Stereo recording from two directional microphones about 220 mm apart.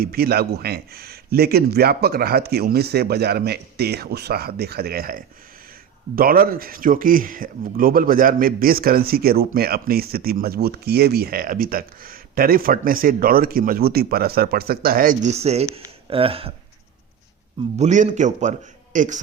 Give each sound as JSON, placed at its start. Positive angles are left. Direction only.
{"t": 0.0, "sound": "speech", "side_deg": -45}
{"t": 17.7, "sound": "speech", "side_deg": -35}